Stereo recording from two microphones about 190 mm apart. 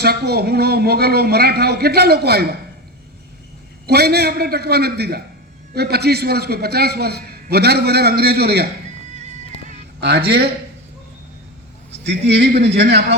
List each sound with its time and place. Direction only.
0.0 s a man's voice: 55° right (ahead or behind)
3.8 s a man's voice: 55° right (ahead or behind)
9.1 s music: 35° right (ahead or behind)
10.0 s a man's voice: 55° right (ahead or behind)
12.3 s a man's voice: 60° right (ahead or behind)